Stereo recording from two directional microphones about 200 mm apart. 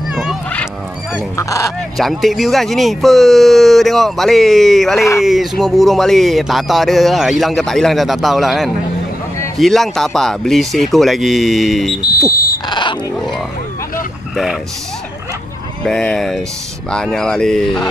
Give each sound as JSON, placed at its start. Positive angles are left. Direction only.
{"t": 0.1, "sound": "a sound", "side_deg": 0}
{"t": 1.1, "sound": "goose", "side_deg": 15}
{"t": 2.0, "sound": "speech", "side_deg": 0}
{"t": 12.0, "sound": "speech", "side_deg": 20}
{"t": 14.3, "sound": "speech", "side_deg": 0}
{"t": 15.8, "sound": "speech", "side_deg": 5}